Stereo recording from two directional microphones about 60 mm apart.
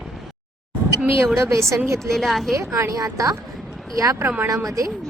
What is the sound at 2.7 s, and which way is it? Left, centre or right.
A woman's voice, right.